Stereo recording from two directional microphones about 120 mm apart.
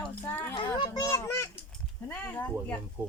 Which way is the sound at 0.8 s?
30° left (ahead or behind).